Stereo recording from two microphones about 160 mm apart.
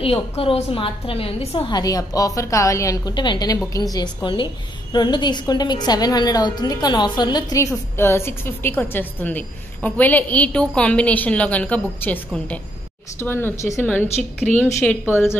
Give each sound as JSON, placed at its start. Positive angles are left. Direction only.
{"t": 0.0, "sound": "a woman's voice", "side_deg": 35}
{"t": 1.7, "sound": "a woman's voice", "side_deg": 25}